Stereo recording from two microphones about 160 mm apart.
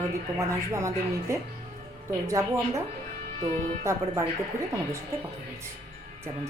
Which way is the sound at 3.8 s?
15° right (ahead or behind).